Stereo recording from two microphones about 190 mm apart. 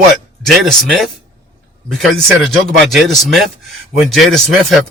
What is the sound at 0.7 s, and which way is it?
Speech, centre (ahead or behind).